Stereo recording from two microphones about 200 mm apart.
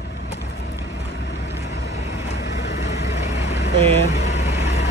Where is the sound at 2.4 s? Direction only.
55° left (ahead or behind).